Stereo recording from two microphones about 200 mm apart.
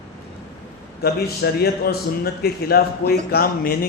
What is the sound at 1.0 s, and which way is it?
A man's voice, 50° left (ahead or behind).